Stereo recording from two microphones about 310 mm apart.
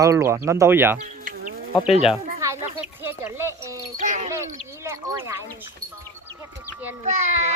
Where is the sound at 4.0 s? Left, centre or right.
Right.